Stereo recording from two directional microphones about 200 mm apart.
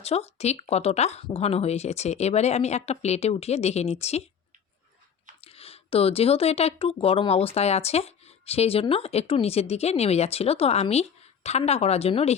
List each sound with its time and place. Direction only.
0.0 s speech: 30° left (ahead or behind)
5.4 s speech: 30° left (ahead or behind)